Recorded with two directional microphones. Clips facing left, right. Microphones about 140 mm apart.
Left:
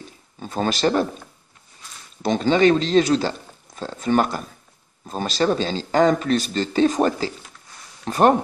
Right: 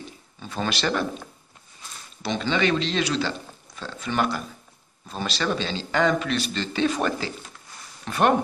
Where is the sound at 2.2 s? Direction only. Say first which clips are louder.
Left 7 dB; 45° left (ahead or behind).